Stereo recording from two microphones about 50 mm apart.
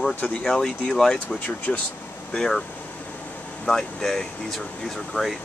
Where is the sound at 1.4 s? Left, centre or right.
Left.